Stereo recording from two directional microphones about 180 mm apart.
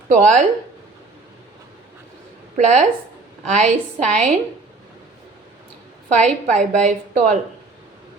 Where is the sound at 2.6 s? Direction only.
40° right (ahead or behind).